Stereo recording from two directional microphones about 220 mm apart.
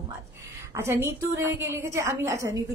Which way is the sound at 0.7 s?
10° right (ahead or behind).